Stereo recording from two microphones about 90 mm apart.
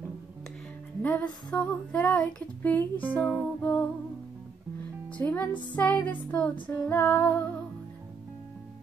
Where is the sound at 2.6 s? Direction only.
20° left (ahead or behind).